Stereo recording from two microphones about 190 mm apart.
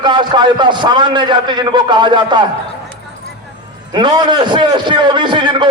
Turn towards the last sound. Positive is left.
turn(degrees=-25)  # may be behind; listen again after turning